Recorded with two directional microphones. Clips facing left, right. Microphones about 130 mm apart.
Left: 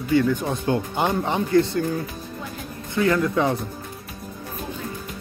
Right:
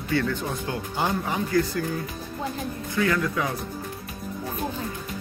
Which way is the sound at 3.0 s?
25° left (ahead or behind).